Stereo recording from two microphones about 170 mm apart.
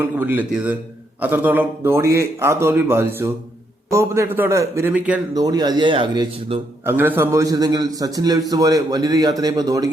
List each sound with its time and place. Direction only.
0.0 s speech: 10° right (ahead or behind)
5.3 s a man's voice: 25° right (ahead or behind)
6.8 s a man's voice: 10° right (ahead or behind)